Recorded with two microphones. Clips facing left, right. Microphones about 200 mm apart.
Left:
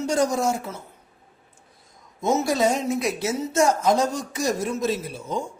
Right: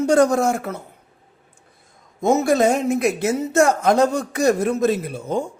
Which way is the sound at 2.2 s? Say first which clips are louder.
Right 5 dB; 55° right (ahead or behind).